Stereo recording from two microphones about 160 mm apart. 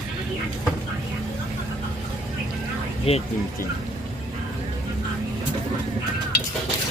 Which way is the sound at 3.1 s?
35° left (ahead or behind).